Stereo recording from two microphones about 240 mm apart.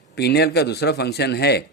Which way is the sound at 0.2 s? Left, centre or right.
Left.